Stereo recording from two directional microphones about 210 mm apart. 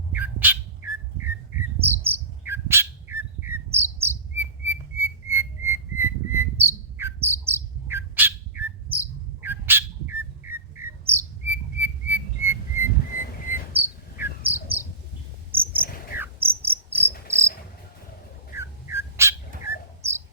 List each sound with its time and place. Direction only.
0.1 s bird: 10° right (ahead or behind)
13.1 s a sound: 40° left (ahead or behind)
13.7 s cricket: 10° right (ahead or behind)
15.5 s cricket: 10° right (ahead or behind)
18.5 s dog: 10° right (ahead or behind)
19.7 s bird: 50° left (ahead or behind)